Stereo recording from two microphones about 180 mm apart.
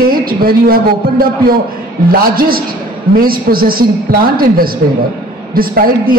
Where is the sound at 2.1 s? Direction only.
55° right (ahead or behind).